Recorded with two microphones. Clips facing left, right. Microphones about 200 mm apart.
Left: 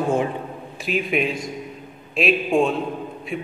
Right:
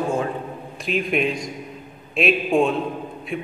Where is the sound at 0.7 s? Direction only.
Centre (ahead or behind).